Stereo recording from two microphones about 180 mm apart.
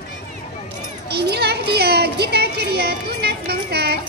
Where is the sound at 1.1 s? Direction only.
65° right (ahead or behind).